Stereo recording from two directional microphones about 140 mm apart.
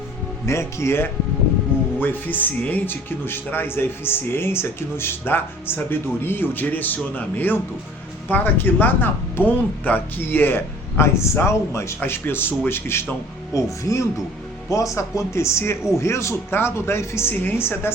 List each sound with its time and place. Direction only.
0.4 s speech: 20° left (ahead or behind)